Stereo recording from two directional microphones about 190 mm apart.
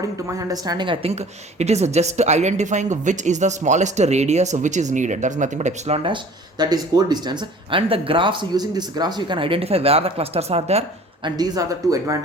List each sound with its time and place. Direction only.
0.3 s a woman's voice: 15° right (ahead or behind); by 11.3 s 30° right (ahead or behind)
11.3 s speech: 20° right (ahead or behind)